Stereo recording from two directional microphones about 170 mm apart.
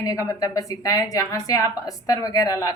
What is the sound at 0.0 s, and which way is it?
A woman's voice, 20° left (ahead or behind).